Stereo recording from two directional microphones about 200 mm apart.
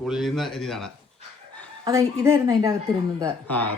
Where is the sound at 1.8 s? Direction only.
15° right (ahead or behind).